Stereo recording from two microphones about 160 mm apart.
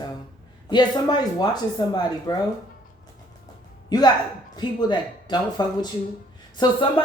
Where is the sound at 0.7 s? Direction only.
25° left (ahead or behind).